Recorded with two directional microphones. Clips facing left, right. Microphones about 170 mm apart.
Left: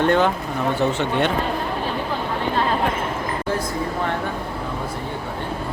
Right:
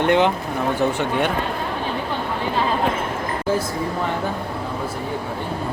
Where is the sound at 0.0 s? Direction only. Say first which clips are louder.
Right 1 dB; 15° right (ahead or behind).